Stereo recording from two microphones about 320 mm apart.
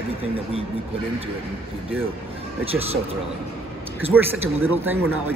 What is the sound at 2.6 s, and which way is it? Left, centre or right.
Speech, centre.